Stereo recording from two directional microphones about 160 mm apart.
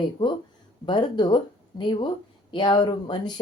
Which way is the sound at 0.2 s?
30° left (ahead or behind).